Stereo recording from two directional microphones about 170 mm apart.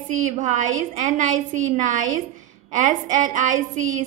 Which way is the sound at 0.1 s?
45° right (ahead or behind).